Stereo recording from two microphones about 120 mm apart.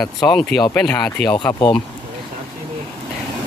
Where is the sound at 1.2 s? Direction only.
35° left (ahead or behind).